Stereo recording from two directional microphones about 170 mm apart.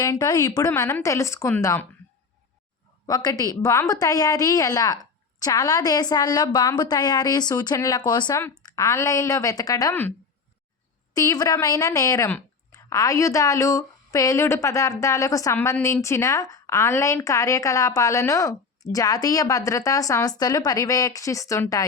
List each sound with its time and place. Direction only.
0.0 s speech: 20° left (ahead or behind)
3.1 s speech: 25° left (ahead or behind)
11.1 s speech: 20° left (ahead or behind)